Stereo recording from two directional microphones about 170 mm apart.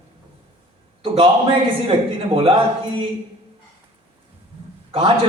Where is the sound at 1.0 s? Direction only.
35° right (ahead or behind).